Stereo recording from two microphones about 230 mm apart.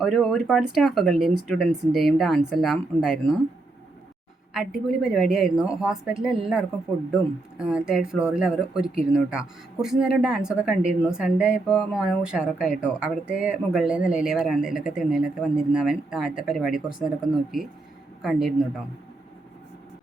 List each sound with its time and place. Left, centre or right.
0.0 s speech: centre
4.9 s a woman's voice: centre